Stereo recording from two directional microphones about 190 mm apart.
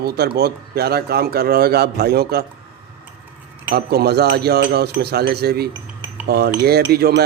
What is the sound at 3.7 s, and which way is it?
Speech, 55° right (ahead or behind).